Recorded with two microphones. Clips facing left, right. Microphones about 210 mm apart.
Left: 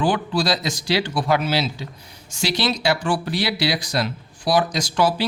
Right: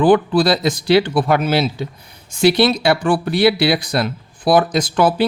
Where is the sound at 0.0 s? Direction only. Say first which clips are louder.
Right 8 dB; 55° right (ahead or behind).